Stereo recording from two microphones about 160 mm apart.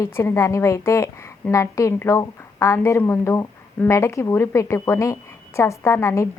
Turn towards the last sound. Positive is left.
turn(degrees=15)  # may be behind; listen again after turning